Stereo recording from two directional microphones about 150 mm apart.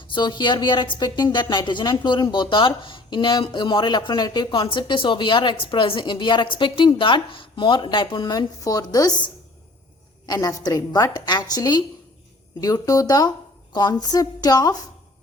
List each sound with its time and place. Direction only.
0.1 s a woman's voice: 30° left (ahead or behind)